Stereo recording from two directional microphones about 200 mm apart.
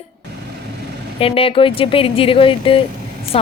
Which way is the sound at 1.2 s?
30° left (ahead or behind).